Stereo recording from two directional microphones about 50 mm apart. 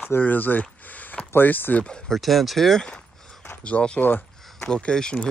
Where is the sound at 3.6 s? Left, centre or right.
Left.